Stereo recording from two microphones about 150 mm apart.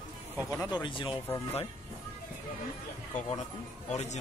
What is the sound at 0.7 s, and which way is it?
Speech, 35° left (ahead or behind).